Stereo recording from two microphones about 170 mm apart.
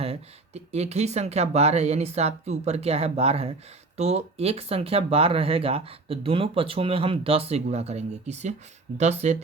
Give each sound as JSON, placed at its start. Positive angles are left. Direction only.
{"t": 0.0, "sound": "speech", "side_deg": -40}